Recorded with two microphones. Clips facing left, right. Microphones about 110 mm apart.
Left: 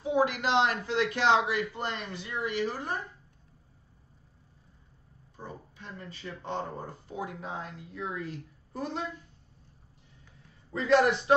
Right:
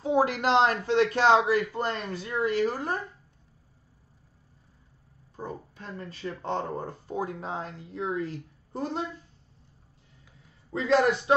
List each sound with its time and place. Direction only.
0.0 s a man's voice: 35° right (ahead or behind)
5.3 s a sound: 40° right (ahead or behind)
6.4 s a man's voice: 35° right (ahead or behind)
10.7 s a woman's voice: 25° right (ahead or behind)